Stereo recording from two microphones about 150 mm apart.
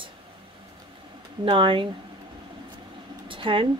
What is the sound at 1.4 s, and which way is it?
Speech, 35° right (ahead or behind).